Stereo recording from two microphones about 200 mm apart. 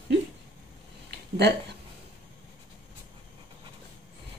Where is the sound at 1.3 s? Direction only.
55° right (ahead or behind).